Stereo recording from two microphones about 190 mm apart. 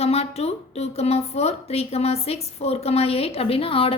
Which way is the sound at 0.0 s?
30° left (ahead or behind).